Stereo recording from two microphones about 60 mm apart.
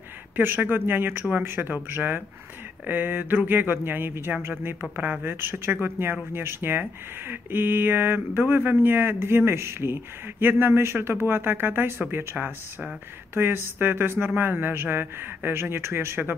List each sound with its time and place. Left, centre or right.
0.4 s speech: right
4.9 s speech: right
10.4 s speech: right